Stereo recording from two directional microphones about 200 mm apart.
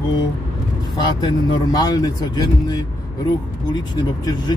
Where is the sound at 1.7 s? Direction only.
20° left (ahead or behind).